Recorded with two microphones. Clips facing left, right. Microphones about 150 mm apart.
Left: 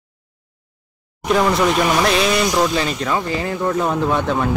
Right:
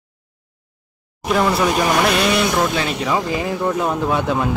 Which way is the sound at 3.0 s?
15° right (ahead or behind).